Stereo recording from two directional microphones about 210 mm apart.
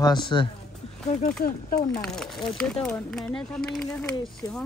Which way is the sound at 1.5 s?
45° left (ahead or behind).